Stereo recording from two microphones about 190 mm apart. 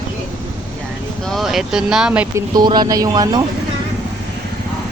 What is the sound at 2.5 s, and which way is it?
Speech, 25° right (ahead or behind).